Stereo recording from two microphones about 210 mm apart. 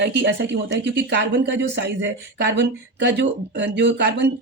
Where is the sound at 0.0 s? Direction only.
55° right (ahead or behind).